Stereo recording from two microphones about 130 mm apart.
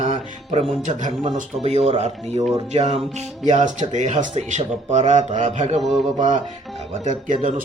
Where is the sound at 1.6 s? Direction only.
55° right (ahead or behind).